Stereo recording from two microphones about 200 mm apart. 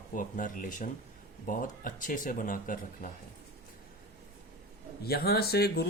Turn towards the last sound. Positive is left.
turn(degrees=50)  # may be behind; listen again after turning